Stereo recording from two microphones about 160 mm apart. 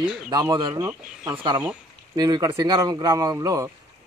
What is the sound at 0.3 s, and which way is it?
Speech, 25° right (ahead or behind).